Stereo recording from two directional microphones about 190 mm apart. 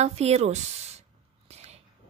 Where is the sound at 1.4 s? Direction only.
35° right (ahead or behind).